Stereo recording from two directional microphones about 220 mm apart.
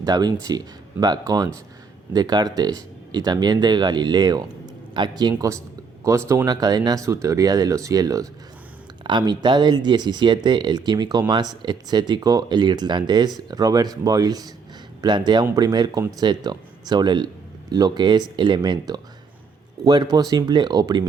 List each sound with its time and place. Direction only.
0.0 s speech: 20° right (ahead or behind)